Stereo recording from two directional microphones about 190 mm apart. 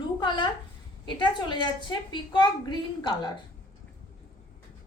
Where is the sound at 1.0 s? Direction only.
25° left (ahead or behind).